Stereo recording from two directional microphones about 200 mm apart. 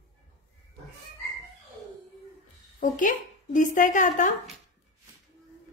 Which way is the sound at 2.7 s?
40° left (ahead or behind).